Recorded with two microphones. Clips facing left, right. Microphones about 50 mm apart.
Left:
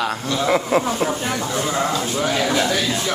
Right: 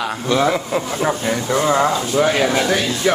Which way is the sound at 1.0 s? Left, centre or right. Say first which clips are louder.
Right 4 dB; right.